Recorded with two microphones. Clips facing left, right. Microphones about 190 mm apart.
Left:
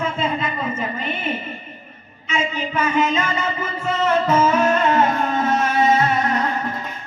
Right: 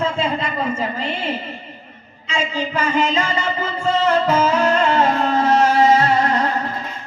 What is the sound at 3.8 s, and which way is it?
Music, 30° right (ahead or behind).